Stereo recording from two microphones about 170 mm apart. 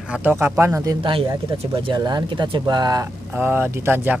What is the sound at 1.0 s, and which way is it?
Speech, 30° right (ahead or behind).